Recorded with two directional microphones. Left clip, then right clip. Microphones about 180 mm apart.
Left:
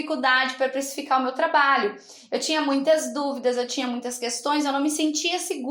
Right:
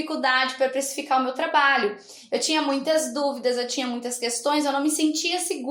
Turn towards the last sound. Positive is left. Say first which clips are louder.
# right 1 dB
turn(degrees=20)  # may be behind; listen again after turning